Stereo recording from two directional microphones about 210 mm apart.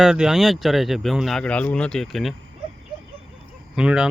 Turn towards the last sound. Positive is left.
turn(degrees=-5)  # may be behind; listen again after turning